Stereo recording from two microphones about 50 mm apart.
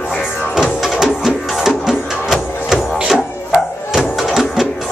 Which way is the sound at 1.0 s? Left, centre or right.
Centre.